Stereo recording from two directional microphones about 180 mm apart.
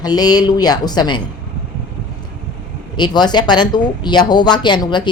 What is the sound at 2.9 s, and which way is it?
Speech, 25° left (ahead or behind).